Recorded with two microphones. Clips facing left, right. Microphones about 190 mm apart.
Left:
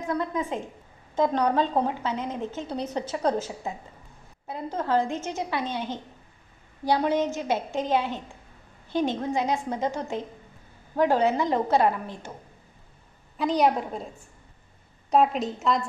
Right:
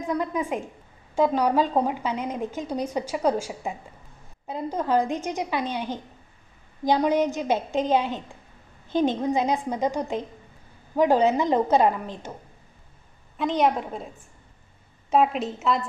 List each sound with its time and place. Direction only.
0.0 s a woman's voice: 15° right (ahead or behind)
13.4 s a woman's voice: centre (ahead or behind)